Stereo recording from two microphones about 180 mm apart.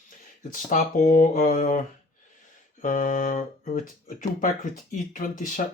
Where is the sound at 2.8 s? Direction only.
50° left (ahead or behind).